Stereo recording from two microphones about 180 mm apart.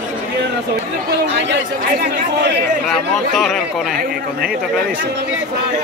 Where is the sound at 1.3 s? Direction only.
75° right (ahead or behind).